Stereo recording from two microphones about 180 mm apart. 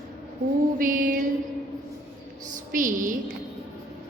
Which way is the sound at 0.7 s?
50° right (ahead or behind).